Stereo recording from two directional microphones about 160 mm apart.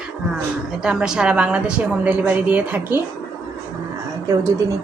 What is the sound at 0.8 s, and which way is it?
A woman's voice, 5° right (ahead or behind).